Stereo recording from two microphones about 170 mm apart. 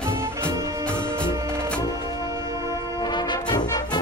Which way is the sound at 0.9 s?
15° right (ahead or behind).